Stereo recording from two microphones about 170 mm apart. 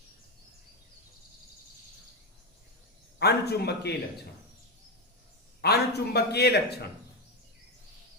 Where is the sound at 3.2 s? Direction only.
70° left (ahead or behind).